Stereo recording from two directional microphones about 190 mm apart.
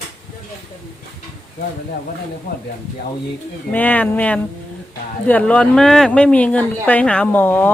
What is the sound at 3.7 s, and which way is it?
Speech, 10° left (ahead or behind).